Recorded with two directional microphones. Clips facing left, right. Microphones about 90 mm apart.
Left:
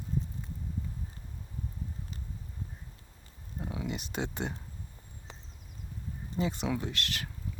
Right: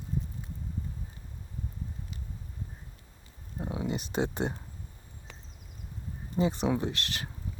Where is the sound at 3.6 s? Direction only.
25° right (ahead or behind).